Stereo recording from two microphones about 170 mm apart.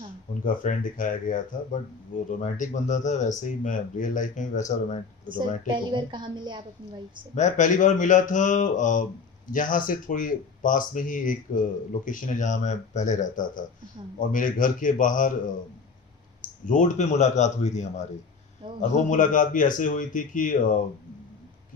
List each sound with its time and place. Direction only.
0.4 s speech: 50° left (ahead or behind)
5.6 s a woman's voice: 30° right (ahead or behind)
7.3 s speech: 45° left (ahead or behind)
16.6 s speech: 50° left (ahead or behind)